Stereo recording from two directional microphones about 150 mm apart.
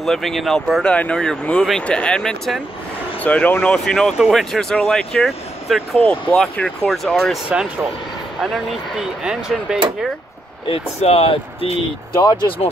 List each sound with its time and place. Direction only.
0.0 s speech: centre (ahead or behind)
10.7 s speech: 40° left (ahead or behind)
12.2 s speech: 30° left (ahead or behind)